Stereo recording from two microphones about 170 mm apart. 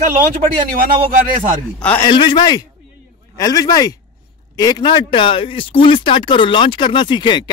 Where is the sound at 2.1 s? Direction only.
25° left (ahead or behind).